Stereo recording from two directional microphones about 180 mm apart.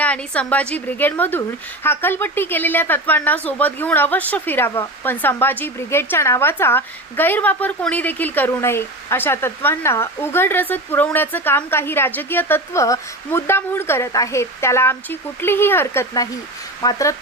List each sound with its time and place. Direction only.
0.0 s a woman's voice: 5° left (ahead or behind)